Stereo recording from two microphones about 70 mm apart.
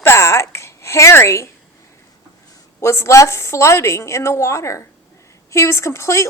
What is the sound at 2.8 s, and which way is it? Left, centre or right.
A woman's voice, left.